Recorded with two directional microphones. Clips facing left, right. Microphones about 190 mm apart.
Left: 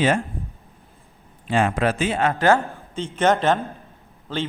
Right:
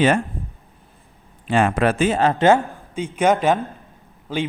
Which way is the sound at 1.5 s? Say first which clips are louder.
Right 3 dB; 60° right (ahead or behind).